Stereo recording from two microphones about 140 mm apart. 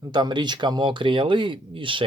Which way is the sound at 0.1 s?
30° right (ahead or behind).